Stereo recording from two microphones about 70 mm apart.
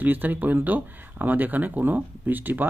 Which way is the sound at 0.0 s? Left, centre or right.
Right.